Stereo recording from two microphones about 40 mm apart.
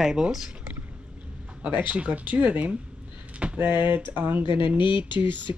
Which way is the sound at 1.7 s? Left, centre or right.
Right.